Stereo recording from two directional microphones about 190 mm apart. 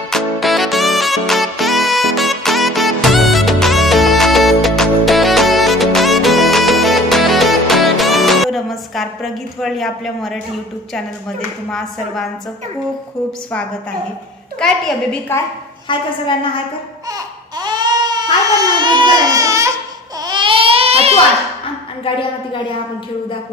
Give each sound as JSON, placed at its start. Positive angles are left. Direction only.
{"t": 0.1, "sound": "music", "side_deg": 0}
{"t": 15.9, "sound": "a woman's voice", "side_deg": 25}
{"t": 17.1, "sound": "baby cry", "side_deg": -20}
{"t": 22.0, "sound": "a woman's voice", "side_deg": 25}